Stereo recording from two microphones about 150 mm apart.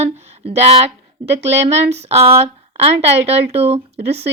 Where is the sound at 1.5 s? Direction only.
45° right (ahead or behind).